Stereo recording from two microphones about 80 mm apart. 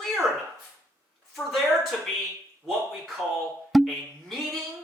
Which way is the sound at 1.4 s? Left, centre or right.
Centre.